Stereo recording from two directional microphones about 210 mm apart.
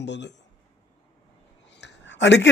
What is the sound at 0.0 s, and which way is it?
Speech, 55° left (ahead or behind).